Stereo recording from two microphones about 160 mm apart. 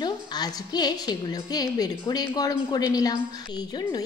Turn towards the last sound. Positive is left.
turn(degrees=25)  # may be behind; listen again after turning